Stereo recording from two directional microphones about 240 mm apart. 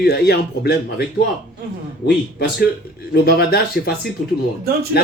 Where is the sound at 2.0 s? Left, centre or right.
Left.